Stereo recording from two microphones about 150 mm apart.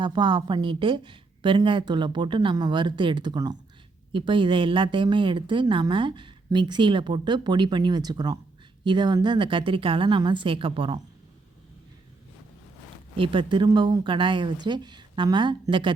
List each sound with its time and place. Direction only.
0.0 s a woman's voice: 30° right (ahead or behind)
13.1 s a woman's voice: 35° right (ahead or behind)